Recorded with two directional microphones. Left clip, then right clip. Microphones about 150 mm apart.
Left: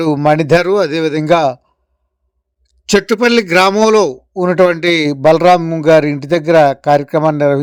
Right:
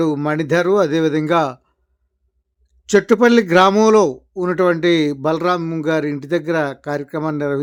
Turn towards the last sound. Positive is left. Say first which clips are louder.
# left 9 dB
turn(degrees=40)  # may be behind; listen again after turning